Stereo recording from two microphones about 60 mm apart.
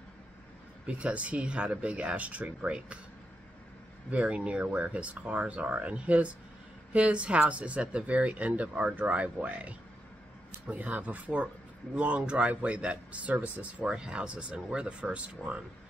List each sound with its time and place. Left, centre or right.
0.8 s speech: right
4.1 s speech: right